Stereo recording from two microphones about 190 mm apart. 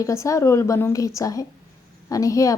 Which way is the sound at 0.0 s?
15° left (ahead or behind).